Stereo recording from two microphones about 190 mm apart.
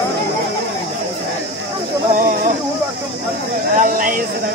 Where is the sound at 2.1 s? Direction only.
45° right (ahead or behind).